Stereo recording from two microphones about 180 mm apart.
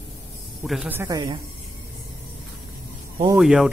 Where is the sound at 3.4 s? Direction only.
Centre (ahead or behind).